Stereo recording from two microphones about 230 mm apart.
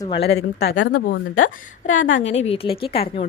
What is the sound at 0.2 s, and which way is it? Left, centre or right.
Speech, left.